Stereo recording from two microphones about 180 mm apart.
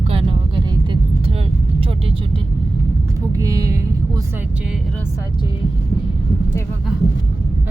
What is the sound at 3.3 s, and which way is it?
Speech, 20° right (ahead or behind).